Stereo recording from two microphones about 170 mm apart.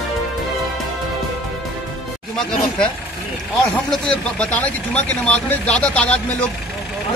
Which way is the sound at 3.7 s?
5° left (ahead or behind).